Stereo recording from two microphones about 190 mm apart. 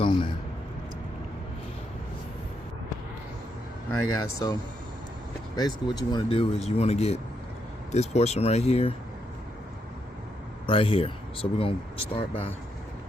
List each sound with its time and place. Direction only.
0.0 s a sound: 25° left (ahead or behind)
4.1 s speech: 20° left (ahead or behind)
5.5 s speech: 20° left (ahead or behind)
10.7 s speech: 30° left (ahead or behind)